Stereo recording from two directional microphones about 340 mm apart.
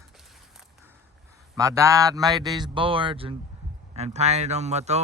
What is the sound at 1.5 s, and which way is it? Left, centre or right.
Speech, centre.